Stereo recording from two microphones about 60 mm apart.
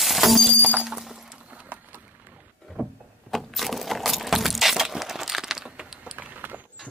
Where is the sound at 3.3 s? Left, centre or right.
Centre.